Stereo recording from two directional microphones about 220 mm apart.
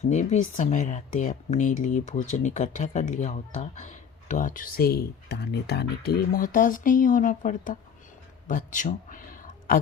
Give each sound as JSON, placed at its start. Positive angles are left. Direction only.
{"t": 0.1, "sound": "speech", "side_deg": 30}